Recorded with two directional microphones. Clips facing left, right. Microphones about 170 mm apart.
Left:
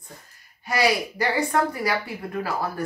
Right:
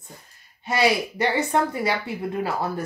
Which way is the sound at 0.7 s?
25° right (ahead or behind).